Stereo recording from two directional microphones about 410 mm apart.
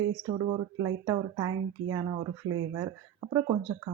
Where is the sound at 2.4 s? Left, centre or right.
Right.